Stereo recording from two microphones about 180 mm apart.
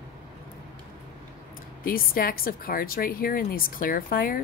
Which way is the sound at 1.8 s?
55° left (ahead or behind).